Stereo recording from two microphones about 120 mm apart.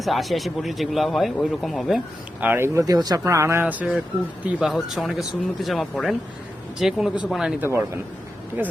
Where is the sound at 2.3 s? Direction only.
15° right (ahead or behind).